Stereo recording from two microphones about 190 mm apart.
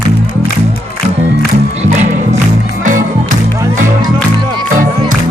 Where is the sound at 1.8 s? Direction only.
40° right (ahead or behind).